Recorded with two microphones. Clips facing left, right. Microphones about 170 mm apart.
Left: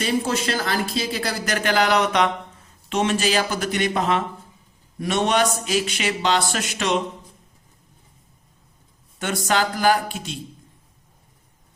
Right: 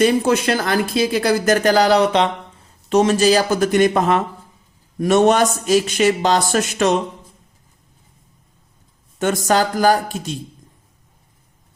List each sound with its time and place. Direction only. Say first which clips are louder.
0.0 s speech: right 7 dB; 55° right (ahead or behind)
1.6 s speech: right 3 dB; 35° right (ahead or behind)
9.1 s speech: right 6 dB; 45° right (ahead or behind)